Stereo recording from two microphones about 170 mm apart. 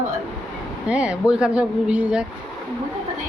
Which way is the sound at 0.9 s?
5° right (ahead or behind).